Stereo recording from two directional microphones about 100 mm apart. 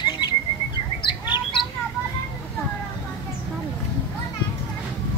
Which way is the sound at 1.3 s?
55° left (ahead or behind).